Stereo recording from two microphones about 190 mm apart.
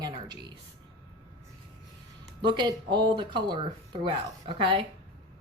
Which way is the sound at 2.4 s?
25° right (ahead or behind).